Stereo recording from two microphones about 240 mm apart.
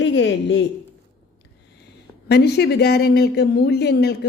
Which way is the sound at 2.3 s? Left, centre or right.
Left.